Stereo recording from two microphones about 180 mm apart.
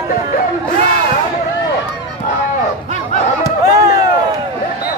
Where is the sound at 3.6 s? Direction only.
20° right (ahead or behind).